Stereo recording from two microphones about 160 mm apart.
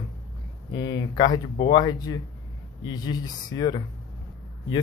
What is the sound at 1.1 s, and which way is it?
Speech, 25° left (ahead or behind).